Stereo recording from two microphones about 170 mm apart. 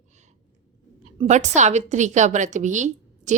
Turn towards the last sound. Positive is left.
turn(degrees=-45)  # may be behind; listen again after turning